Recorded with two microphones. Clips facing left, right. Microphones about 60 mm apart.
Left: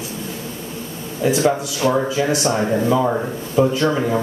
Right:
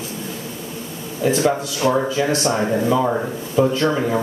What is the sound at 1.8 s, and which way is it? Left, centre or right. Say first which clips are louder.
Speech: even; centre.